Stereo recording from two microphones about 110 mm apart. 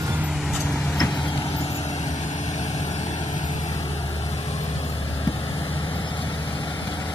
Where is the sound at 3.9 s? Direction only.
55° left (ahead or behind).